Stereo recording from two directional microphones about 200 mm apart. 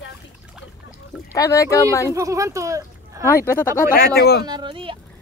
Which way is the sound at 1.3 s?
15° left (ahead or behind).